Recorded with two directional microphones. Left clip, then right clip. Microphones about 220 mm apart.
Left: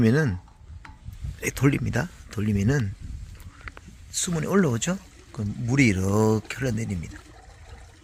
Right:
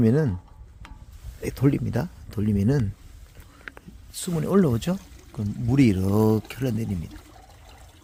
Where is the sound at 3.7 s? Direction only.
20° right (ahead or behind).